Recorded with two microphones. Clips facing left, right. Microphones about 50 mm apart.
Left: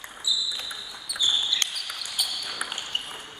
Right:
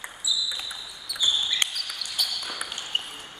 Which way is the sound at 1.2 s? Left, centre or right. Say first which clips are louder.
Even; centre.